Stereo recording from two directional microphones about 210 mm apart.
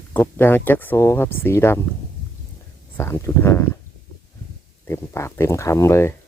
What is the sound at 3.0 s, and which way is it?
Speech, 15° left (ahead or behind).